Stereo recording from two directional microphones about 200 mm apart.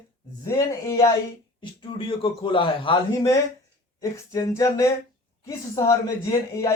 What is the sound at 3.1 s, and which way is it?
A man's voice, 15° left (ahead or behind).